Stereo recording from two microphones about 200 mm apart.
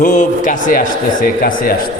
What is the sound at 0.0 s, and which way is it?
Speech, 40° left (ahead or behind).